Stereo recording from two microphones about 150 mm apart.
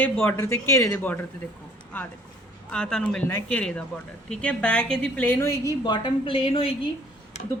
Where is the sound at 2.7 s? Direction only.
5° left (ahead or behind); by 6.7 s 40° left (ahead or behind).